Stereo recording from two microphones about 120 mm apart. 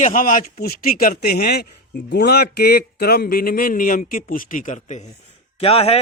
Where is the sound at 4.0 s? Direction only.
90° left.